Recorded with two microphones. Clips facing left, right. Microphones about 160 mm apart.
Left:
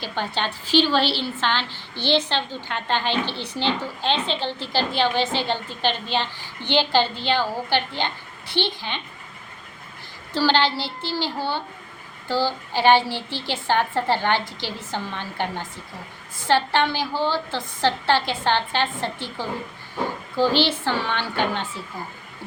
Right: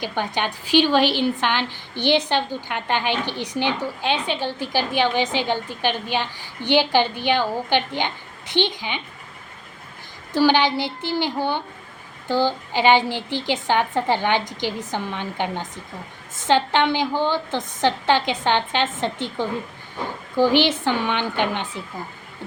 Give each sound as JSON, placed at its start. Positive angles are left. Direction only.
{"t": 0.0, "sound": "a woman's voice", "side_deg": -15}
{"t": 10.3, "sound": "a woman's voice", "side_deg": -15}